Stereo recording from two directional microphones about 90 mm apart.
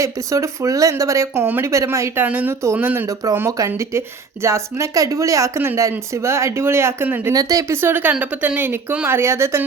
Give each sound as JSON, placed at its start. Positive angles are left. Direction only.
{"t": 0.0, "sound": "speech", "side_deg": -35}
{"t": 1.5, "sound": "speech", "side_deg": -20}
{"t": 1.7, "sound": "speech", "side_deg": -35}
{"t": 2.2, "sound": "speech", "side_deg": -20}
{"t": 7.3, "sound": "speech", "side_deg": -40}
{"t": 7.8, "sound": "speech", "side_deg": -25}